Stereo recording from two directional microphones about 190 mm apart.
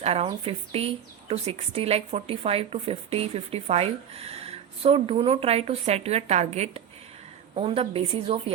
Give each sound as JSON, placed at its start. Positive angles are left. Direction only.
{"t": 0.0, "sound": "speech", "side_deg": -35}